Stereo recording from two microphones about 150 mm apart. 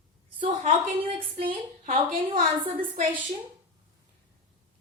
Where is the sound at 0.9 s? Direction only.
40° right (ahead or behind).